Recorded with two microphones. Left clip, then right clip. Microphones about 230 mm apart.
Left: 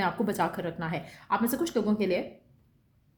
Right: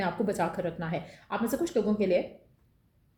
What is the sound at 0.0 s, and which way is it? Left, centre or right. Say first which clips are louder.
A woman's voice: left 1 dB; left.